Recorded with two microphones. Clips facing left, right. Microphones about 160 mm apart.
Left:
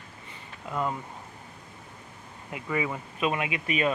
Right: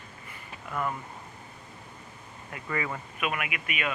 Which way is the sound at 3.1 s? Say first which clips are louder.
Left 5 dB; 25° left (ahead or behind).